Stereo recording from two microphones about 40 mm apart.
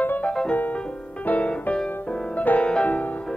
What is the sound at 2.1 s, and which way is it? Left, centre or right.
Music, left.